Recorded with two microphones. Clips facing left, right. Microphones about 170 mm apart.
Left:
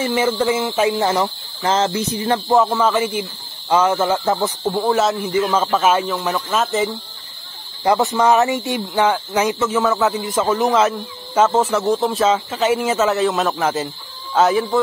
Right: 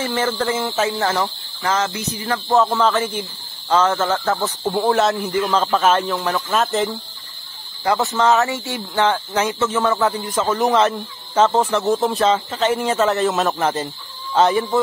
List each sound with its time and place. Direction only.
0.0 s speech: 10° left (ahead or behind)
1.6 s a sound: 30° left (ahead or behind)
2.5 s speech: 10° left (ahead or behind)
4.6 s speech: centre (ahead or behind)
7.8 s speech: 20° left (ahead or behind); by 14.8 s centre (ahead or behind)